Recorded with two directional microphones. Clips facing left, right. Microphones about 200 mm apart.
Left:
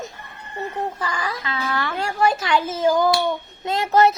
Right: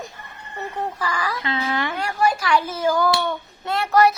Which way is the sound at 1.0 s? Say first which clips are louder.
Right 1 dB; 25° left (ahead or behind).